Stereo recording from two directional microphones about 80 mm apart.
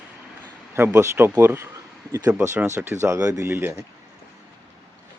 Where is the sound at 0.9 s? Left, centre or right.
Right.